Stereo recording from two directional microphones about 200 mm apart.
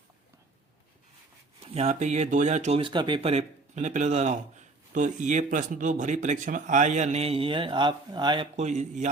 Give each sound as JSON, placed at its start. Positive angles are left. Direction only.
{"t": 1.7, "sound": "speech", "side_deg": -35}
{"t": 8.5, "sound": "speech", "side_deg": -35}